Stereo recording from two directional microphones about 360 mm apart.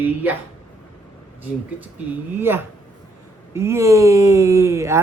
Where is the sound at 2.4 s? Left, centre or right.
Centre.